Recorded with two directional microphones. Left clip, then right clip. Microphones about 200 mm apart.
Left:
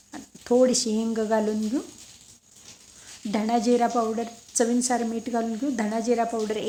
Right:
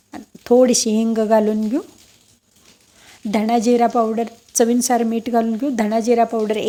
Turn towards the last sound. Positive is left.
turn(degrees=-40)  # may be behind; listen again after turning